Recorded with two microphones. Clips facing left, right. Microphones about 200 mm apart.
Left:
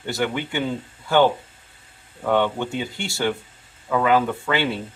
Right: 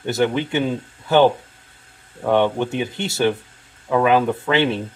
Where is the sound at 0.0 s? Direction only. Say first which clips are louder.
Right 5 dB; 20° right (ahead or behind).